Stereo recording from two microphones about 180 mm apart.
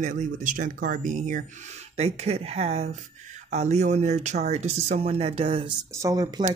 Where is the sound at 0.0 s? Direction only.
45° right (ahead or behind).